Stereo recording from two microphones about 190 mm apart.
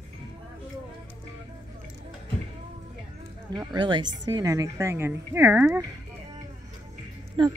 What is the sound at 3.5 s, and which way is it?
A woman's voice, 20° right (ahead or behind).